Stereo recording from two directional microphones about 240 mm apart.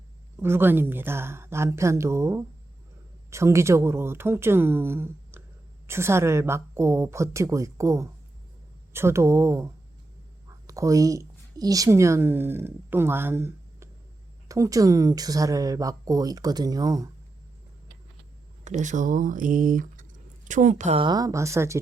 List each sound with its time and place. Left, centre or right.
0.3 s a woman's voice: centre
18.6 s speech: right; by 21.8 s centre